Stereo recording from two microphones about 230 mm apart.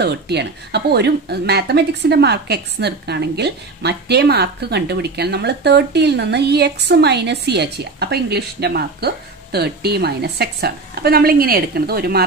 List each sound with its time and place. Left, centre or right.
0.0 s speech: right